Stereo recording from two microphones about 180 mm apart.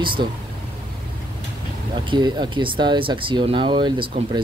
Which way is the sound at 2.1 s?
25° right (ahead or behind).